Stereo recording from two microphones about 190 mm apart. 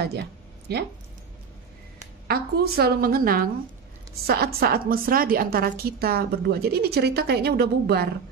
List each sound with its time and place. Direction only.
0.7 s a woman's voice: 60° right (ahead or behind)
2.2 s a woman's voice: 55° right (ahead or behind)